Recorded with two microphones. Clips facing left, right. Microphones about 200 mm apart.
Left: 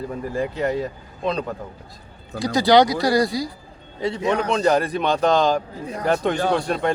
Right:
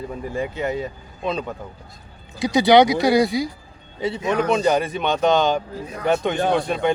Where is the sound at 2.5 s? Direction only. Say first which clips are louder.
Right 2 dB; 20° right (ahead or behind).